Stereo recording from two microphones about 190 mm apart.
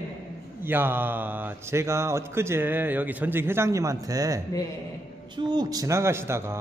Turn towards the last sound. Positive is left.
turn(degrees=-15)  # may be behind; listen again after turning